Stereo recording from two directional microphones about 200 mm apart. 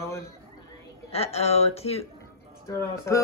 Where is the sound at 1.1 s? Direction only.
30° left (ahead or behind).